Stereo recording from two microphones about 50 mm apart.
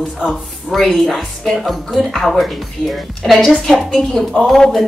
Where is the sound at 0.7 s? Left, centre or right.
Centre.